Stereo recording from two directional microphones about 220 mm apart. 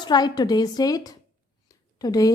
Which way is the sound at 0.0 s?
20° left (ahead or behind).